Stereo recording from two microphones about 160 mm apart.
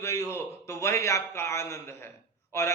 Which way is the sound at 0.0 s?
15° left (ahead or behind).